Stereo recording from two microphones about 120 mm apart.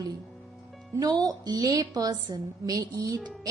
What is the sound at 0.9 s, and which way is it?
A woman's voice, 35° right (ahead or behind).